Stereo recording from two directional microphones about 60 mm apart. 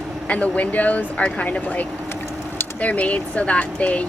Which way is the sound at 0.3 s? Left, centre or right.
Left.